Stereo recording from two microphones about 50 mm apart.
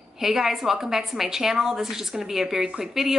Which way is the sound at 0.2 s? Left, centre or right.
Centre.